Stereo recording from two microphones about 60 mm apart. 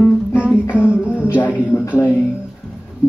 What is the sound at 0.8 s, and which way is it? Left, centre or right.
Music, centre.